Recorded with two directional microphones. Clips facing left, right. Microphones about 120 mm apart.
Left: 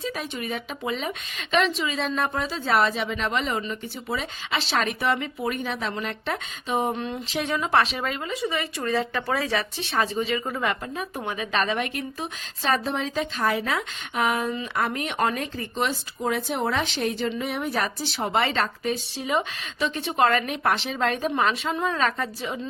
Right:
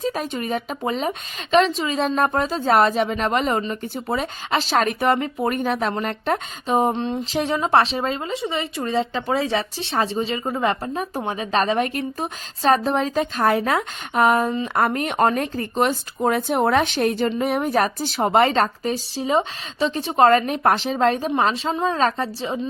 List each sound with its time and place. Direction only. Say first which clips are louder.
0.0 s speech: right 6 dB; 45° right (ahead or behind)
6.9 s a woman's voice: right 5 dB; 30° right (ahead or behind)